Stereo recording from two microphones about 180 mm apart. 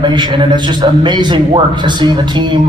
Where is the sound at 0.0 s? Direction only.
25° right (ahead or behind).